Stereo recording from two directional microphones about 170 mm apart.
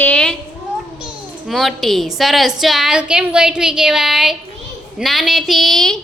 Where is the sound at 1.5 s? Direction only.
Centre (ahead or behind).